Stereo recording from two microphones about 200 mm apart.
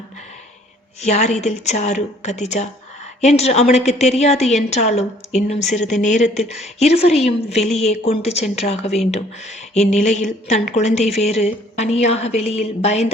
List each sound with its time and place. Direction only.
1.0 s a woman's voice: 35° left (ahead or behind)